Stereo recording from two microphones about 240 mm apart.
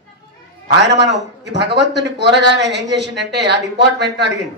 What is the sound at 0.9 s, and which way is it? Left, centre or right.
Speech, right.